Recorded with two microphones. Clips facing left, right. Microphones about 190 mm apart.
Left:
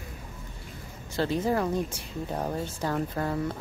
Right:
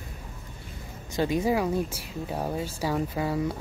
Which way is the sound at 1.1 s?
15° right (ahead or behind).